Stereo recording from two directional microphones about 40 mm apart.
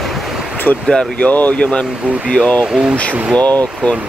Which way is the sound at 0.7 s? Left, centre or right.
Left.